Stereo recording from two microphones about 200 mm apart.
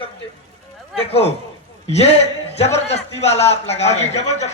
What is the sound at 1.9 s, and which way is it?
A man's voice, 30° left (ahead or behind).